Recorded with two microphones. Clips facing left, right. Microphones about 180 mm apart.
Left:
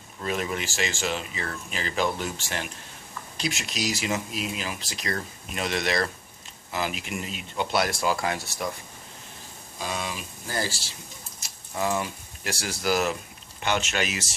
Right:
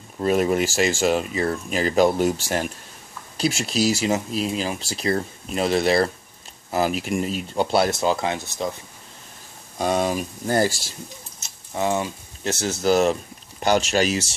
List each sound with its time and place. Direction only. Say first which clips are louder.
0.2 s speech: right 10 dB; 45° right (ahead or behind); by 8.7 s 20° right (ahead or behind)
9.8 s speech: right 11 dB; 45° right (ahead or behind)
11.3 s speech: right 4 dB; 25° right (ahead or behind)